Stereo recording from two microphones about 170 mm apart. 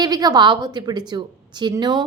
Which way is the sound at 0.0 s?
25° right (ahead or behind).